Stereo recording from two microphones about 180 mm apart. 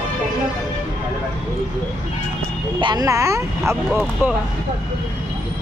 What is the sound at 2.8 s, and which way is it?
Speech, 20° right (ahead or behind).